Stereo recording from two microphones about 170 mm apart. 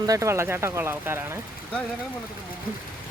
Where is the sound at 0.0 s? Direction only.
20° right (ahead or behind).